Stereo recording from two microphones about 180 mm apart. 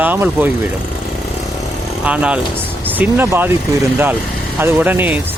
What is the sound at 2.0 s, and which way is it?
Speech, 5° right (ahead or behind).